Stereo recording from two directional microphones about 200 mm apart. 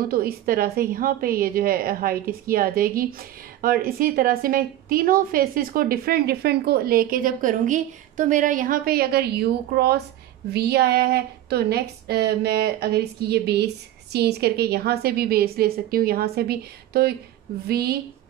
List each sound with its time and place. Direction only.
0.0 s a woman's voice: 50° right (ahead or behind)